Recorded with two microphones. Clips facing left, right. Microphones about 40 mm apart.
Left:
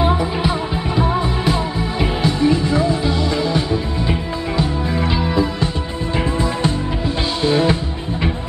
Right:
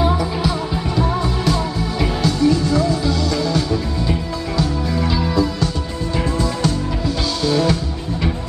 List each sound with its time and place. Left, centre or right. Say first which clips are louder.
0.0 s music: left 1 dB; left